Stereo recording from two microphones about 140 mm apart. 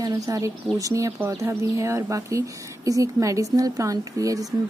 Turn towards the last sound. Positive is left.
turn(degrees=-25)  # may be behind; listen again after turning